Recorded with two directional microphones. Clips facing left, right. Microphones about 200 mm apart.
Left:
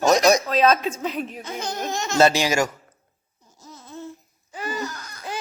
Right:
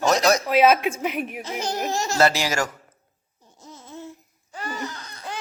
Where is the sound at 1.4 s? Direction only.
35° right (ahead or behind).